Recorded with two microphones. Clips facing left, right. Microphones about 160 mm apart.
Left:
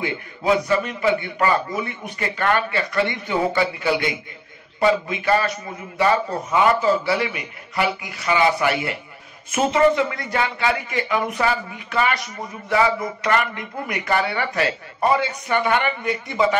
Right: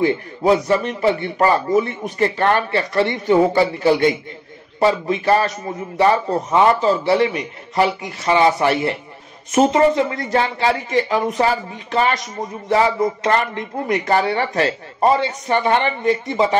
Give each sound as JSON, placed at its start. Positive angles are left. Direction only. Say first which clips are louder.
{"t": 0.0, "sound": "a man's voice", "louder": "right 7 dB", "side_deg": -35}
{"t": 6.5, "sound": "a man's voice", "louder": "right 2 dB", "side_deg": -30}